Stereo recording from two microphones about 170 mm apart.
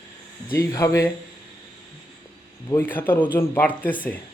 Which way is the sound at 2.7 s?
10° left (ahead or behind).